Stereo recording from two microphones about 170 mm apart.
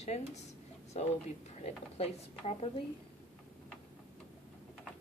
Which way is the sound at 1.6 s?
35° left (ahead or behind).